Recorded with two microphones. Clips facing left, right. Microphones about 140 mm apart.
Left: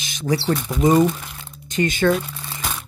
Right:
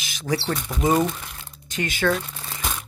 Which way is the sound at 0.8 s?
5° right (ahead or behind).